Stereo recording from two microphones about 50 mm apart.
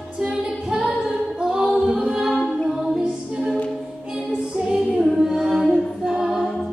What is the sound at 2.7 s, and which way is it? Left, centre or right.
Music, centre.